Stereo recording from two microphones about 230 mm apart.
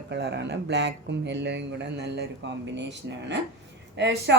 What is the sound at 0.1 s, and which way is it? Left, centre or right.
Speech, right.